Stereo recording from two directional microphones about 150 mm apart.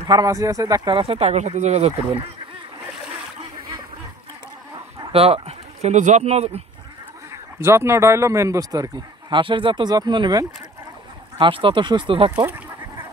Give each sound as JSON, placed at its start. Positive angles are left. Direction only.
{"t": 0.0, "sound": "speech", "side_deg": -25}
{"t": 5.1, "sound": "speech", "side_deg": -40}
{"t": 7.6, "sound": "speech", "side_deg": -15}